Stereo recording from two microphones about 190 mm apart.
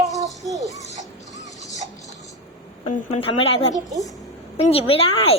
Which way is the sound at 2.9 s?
30° left (ahead or behind).